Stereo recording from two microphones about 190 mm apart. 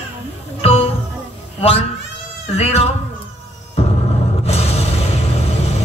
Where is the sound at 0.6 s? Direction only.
35° left (ahead or behind).